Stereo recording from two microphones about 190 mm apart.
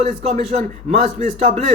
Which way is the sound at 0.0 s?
35° right (ahead or behind).